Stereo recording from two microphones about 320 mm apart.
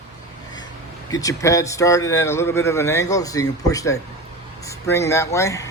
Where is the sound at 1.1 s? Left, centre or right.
Centre.